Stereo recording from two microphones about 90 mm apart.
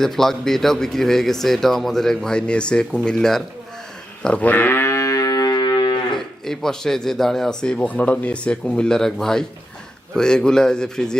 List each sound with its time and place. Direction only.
0.0 s speech: 5° left (ahead or behind)
4.2 s livestock: 15° left (ahead or behind); by 6.1 s 55° left (ahead or behind)
6.1 s a man's voice: 5° left (ahead or behind)